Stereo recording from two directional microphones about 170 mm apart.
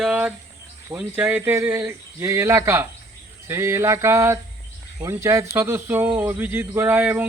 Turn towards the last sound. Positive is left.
turn(degrees=-10)  # may be behind; listen again after turning